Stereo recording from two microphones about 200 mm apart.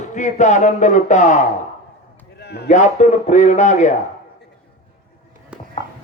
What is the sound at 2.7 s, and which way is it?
A man's voice, 40° left (ahead or behind).